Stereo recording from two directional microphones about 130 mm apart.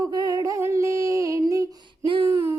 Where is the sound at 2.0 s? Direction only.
40° right (ahead or behind).